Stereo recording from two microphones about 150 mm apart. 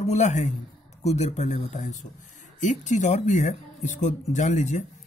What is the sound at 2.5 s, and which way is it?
Speech, 55° left (ahead or behind).